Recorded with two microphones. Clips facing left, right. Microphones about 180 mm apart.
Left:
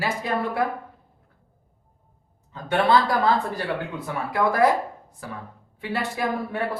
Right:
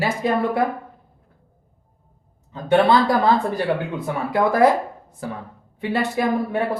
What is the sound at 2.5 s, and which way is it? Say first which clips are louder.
Speech: right 5 dB; 20° right (ahead or behind).